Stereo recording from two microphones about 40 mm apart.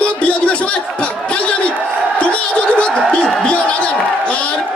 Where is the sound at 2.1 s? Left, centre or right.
Left.